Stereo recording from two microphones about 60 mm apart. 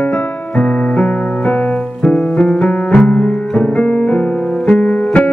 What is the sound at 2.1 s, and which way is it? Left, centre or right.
Music, centre.